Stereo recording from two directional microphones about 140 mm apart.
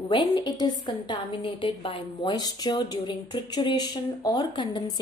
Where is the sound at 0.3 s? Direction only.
30° left (ahead or behind).